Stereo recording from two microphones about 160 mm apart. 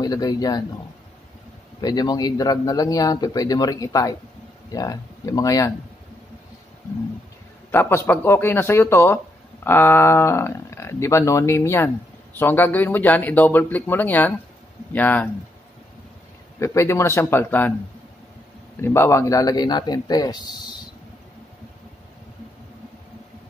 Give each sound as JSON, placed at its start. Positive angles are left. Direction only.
{"t": 0.0, "sound": "speech", "side_deg": 25}
{"t": 1.8, "sound": "speech", "side_deg": 25}
{"t": 7.7, "sound": "speech", "side_deg": 15}
{"t": 16.5, "sound": "speech", "side_deg": 15}
{"t": 18.8, "sound": "speech", "side_deg": 15}